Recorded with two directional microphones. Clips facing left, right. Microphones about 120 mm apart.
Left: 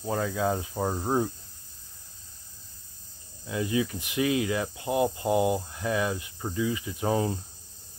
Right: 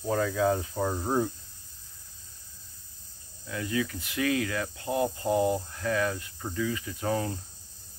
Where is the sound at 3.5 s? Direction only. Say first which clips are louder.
Left 3 dB; 20° left (ahead or behind).